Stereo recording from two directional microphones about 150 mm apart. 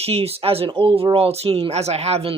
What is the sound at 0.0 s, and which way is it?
Speech, 40° right (ahead or behind).